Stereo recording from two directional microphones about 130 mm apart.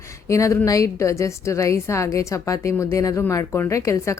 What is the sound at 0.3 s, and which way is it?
Speech, 25° left (ahead or behind).